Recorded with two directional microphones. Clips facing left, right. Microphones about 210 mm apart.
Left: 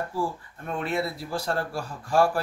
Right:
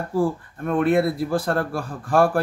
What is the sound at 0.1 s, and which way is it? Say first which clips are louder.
Speech: right 8 dB; 55° right (ahead or behind).